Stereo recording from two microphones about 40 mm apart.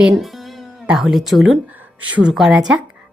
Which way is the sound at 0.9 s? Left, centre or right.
Centre.